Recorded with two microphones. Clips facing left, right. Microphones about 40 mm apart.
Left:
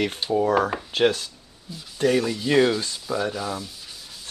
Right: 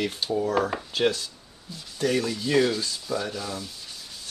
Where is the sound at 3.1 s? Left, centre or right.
Centre.